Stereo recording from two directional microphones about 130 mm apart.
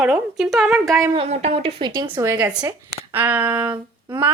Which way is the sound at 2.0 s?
30° right (ahead or behind).